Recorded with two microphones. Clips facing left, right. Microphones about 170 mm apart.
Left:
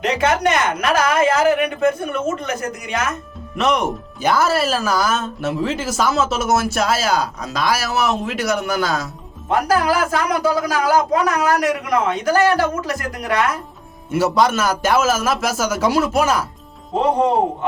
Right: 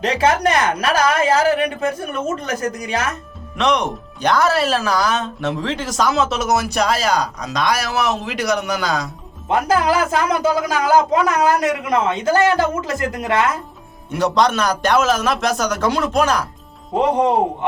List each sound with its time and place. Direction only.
0.0 s a woman's voice: 30° right (ahead or behind)
3.6 s speech: 5° left (ahead or behind)
9.5 s speech: 25° right (ahead or behind)
14.1 s speech: 5° left (ahead or behind)